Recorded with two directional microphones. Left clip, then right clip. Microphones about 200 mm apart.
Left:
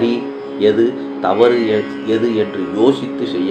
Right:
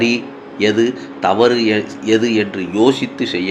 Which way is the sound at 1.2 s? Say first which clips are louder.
Even; 50° right (ahead or behind).